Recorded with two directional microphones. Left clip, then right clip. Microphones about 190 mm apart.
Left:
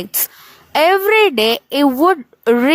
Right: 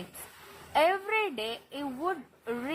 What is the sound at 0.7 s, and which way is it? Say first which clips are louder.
A woman's voice: left 14 dB; 60° left (ahead or behind).